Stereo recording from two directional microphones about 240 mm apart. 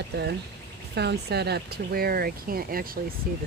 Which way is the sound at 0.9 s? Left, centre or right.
Right.